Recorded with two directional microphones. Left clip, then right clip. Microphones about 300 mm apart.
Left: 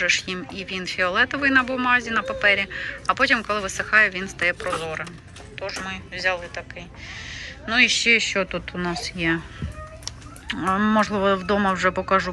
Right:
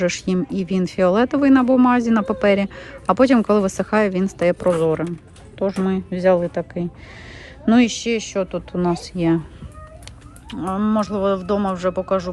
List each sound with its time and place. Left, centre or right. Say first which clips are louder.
0.0 s speech: right 1 dB; centre
10.5 s speech: left 2 dB; centre